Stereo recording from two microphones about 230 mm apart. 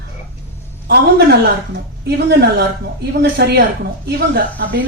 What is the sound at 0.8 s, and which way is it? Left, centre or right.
Speech, right.